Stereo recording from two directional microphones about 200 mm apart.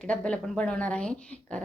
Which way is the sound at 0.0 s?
5° left (ahead or behind).